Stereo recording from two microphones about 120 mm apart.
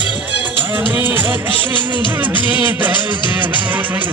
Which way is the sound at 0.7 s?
15° right (ahead or behind).